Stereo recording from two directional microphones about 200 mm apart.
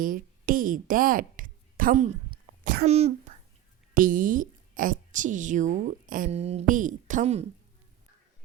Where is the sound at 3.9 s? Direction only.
45° right (ahead or behind).